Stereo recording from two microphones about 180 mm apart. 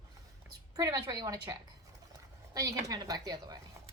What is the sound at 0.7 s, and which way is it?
A woman's voice, 20° right (ahead or behind).